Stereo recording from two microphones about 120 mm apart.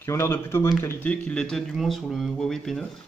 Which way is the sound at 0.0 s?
20° left (ahead or behind).